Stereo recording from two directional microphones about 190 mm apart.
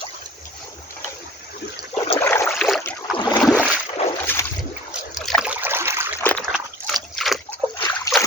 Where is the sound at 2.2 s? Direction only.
15° left (ahead or behind).